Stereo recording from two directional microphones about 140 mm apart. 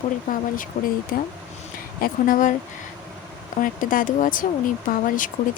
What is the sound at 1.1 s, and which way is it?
Speech, 90° left.